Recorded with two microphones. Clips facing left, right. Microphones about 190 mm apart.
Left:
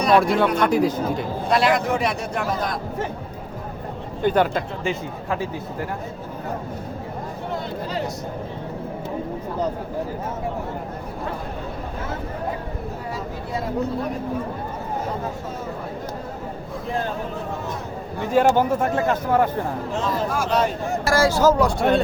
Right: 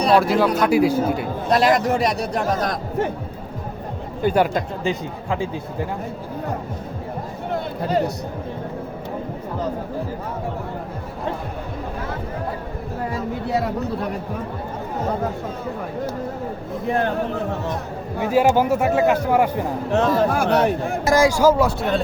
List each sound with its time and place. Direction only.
0.2 s speech: centre (ahead or behind)
1.5 s a man's voice: 40° right (ahead or behind)
4.2 s speech: 10° right (ahead or behind)
7.9 s a man's voice: 50° right (ahead or behind)
18.3 s speech: 10° right (ahead or behind)
19.9 s speech: 60° right (ahead or behind)
21.0 s speech: 15° right (ahead or behind)